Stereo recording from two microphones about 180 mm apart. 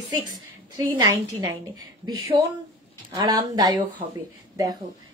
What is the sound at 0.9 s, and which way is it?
Speech, 20° right (ahead or behind).